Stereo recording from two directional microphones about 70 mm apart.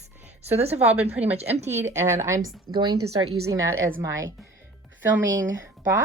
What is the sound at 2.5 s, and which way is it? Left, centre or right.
Speech, right.